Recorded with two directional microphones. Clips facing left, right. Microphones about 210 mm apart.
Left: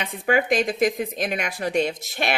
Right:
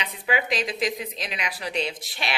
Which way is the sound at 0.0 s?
50° left (ahead or behind).